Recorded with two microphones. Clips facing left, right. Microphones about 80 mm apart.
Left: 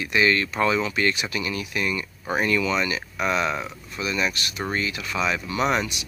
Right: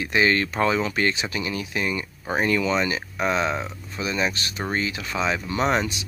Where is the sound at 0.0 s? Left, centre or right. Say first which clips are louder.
Even; right.